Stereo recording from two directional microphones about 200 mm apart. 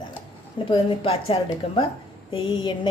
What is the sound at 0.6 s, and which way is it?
A woman's voice, 25° left (ahead or behind).